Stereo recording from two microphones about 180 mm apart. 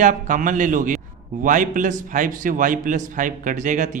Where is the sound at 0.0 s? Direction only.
45° right (ahead or behind).